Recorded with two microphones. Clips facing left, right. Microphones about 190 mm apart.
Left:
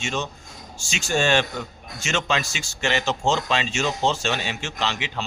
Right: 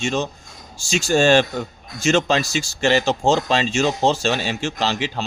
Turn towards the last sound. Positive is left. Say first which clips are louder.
# right 5 dB
turn(degrees=-35)  # may be behind; listen again after turning